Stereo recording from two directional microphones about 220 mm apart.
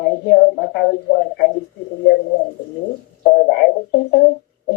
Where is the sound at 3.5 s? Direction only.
45° left (ahead or behind).